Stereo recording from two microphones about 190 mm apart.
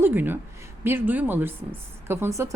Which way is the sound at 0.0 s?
10° right (ahead or behind).